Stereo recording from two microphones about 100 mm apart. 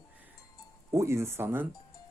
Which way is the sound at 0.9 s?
30° right (ahead or behind).